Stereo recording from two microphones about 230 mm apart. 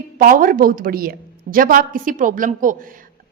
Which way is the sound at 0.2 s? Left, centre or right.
Right.